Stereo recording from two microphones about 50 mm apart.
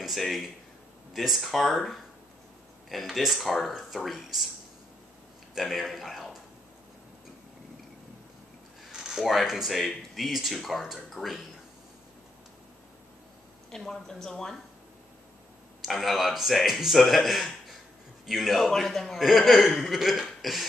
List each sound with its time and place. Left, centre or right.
0.0 s a man's voice: centre
3.1 s a man's voice: centre
3.3 s a man's voice: centre
5.6 s a man's voice: centre
9.2 s a man's voice: centre
13.7 s a woman's voice: centre
15.8 s a man's voice: centre